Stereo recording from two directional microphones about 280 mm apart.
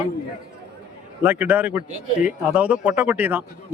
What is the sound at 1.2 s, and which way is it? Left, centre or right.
A man's voice, centre.